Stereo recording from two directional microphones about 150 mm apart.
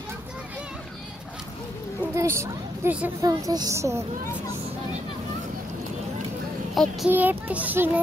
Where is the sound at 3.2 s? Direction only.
25° right (ahead or behind).